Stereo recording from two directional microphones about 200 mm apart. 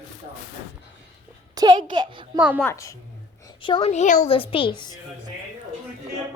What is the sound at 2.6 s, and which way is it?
A woman's voice, 15° left (ahead or behind).